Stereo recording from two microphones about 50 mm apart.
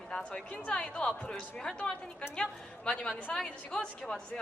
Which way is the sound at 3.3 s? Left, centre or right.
Centre.